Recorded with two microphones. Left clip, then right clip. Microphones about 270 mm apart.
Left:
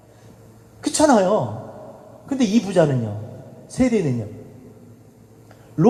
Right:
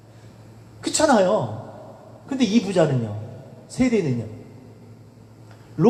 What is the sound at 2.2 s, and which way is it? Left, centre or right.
A woman's voice, left.